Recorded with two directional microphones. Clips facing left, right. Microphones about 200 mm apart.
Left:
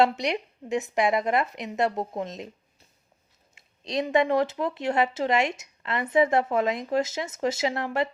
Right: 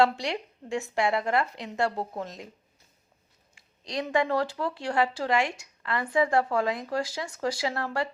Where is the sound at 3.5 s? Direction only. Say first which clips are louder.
Left 4 dB; 20° left (ahead or behind).